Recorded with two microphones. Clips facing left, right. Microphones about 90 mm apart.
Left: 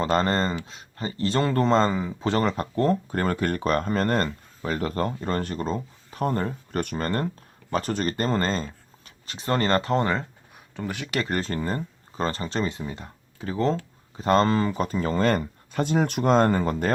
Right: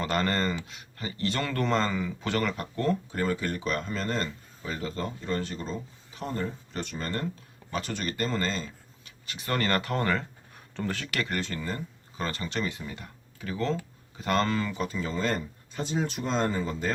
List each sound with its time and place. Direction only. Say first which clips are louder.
0.0 s speech: left 5 dB; 30° left (ahead or behind); by 7.3 s 50° left (ahead or behind)
7.7 s speech: left 7 dB; 40° left (ahead or behind); by 11.2 s 15° left (ahead or behind)
11.2 s speech: left 6 dB; 35° left (ahead or behind); by 16.9 s 55° left (ahead or behind)